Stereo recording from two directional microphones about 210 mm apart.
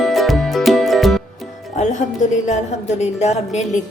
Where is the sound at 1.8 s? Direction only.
35° left (ahead or behind).